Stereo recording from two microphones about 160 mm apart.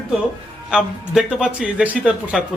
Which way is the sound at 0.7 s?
5° right (ahead or behind).